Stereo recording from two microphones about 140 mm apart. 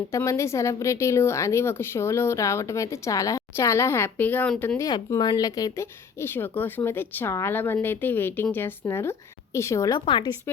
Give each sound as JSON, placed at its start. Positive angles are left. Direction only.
{"t": 0.1, "sound": "speech", "side_deg": 20}
{"t": 4.8, "sound": "speech", "side_deg": 25}
{"t": 10.1, "sound": "a woman's voice", "side_deg": 35}